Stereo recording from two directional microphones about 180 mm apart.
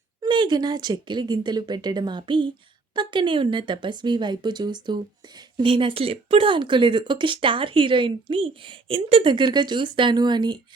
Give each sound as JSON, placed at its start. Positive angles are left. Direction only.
{"t": 0.2, "sound": "speech", "side_deg": -25}